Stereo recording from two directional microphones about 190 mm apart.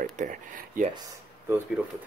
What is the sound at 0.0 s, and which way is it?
Speech, 45° right (ahead or behind).